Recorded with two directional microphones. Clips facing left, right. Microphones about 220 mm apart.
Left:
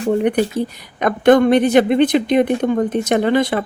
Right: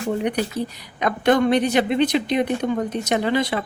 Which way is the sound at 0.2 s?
50° left (ahead or behind).